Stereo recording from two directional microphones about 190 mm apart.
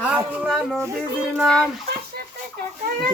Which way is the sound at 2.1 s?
55° right (ahead or behind).